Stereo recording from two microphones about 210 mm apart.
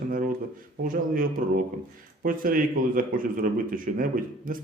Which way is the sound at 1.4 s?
45° right (ahead or behind).